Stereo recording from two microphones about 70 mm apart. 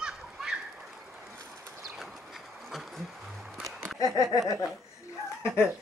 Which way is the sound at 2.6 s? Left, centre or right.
Centre.